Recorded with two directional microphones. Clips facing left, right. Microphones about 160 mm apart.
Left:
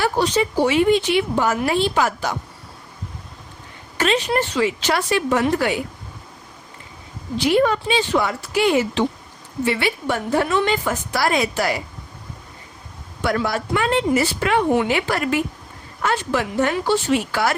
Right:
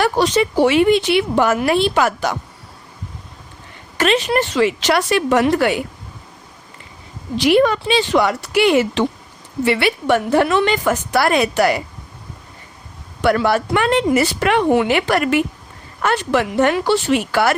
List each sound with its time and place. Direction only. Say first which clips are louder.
0.0 s speech: right 3 dB; 75° right (ahead or behind)
3.9 s speech: right 3 dB; 80° right; by 5.8 s 65° right (ahead or behind)
7.3 s speech: right 3 dB; 90° right; by 11.8 s 65° right (ahead or behind)
13.2 s speech: right 6 dB; 70° right (ahead or behind)